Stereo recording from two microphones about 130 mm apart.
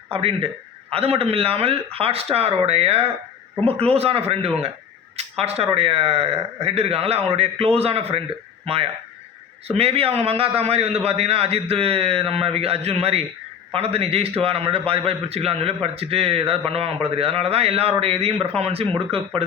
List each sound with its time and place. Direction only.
0.1 s a man's voice: 45° right (ahead or behind)